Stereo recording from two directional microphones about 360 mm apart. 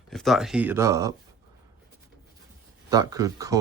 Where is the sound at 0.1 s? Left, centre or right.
Centre.